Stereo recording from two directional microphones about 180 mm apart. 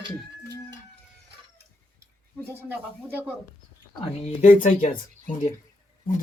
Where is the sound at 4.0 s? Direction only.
40° left (ahead or behind).